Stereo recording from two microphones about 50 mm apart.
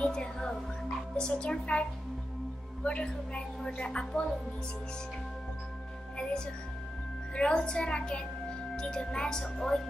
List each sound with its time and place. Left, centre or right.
0.0 s music: centre
1.1 s a woman's voice: left
6.1 s a woman's voice: centre